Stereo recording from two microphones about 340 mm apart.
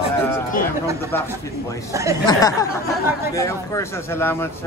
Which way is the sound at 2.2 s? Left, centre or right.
Centre.